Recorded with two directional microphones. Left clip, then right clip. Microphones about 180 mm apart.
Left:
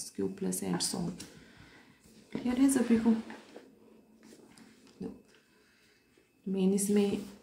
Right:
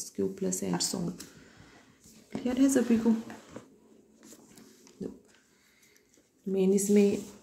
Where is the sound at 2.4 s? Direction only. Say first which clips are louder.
Right 2 dB; 20° right (ahead or behind).